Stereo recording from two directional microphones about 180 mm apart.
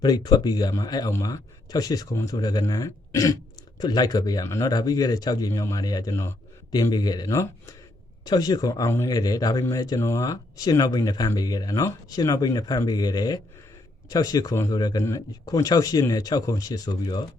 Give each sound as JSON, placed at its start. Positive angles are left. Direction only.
{"t": 0.0, "sound": "speech", "side_deg": 20}